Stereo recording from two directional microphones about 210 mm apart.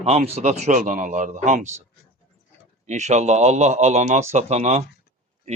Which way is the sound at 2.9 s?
35° right (ahead or behind).